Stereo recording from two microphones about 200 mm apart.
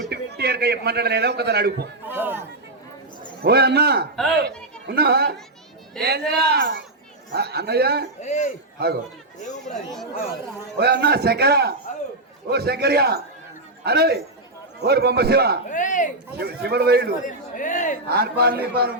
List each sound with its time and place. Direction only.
0.1 s a man's voice: 55° right (ahead or behind)
2.0 s chatter: 10° right (ahead or behind)
3.4 s a man's voice: 50° right (ahead or behind)
8.2 s a man's voice: 35° left (ahead or behind)
8.8 s a man's voice: 50° right (ahead or behind)
9.6 s speech: centre (ahead or behind)
10.8 s a man's voice: 55° right (ahead or behind)
15.7 s a man's voice: 40° left (ahead or behind)
16.4 s a man's voice: 50° right (ahead or behind)
17.2 s a man's voice: 40° left (ahead or behind)
18.1 s a man's voice: 50° right (ahead or behind)